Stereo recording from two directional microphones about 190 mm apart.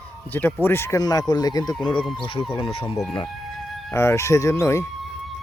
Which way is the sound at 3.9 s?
15° left (ahead or behind).